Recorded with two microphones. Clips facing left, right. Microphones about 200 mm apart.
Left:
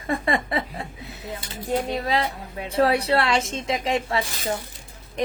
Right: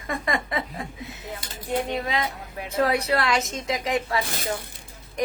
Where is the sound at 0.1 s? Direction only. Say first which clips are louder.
Left 3 dB; 30° left (ahead or behind).